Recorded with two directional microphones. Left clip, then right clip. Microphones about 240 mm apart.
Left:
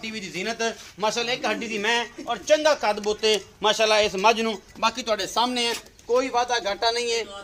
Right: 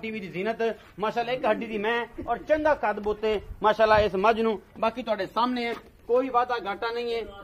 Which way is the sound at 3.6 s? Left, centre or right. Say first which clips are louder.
Right 1 dB; right.